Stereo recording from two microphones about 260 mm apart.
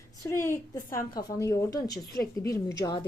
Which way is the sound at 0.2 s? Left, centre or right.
Centre.